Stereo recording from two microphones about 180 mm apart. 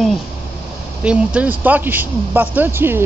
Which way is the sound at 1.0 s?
5° right (ahead or behind).